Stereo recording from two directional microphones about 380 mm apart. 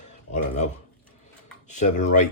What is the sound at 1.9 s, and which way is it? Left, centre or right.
Speech, centre.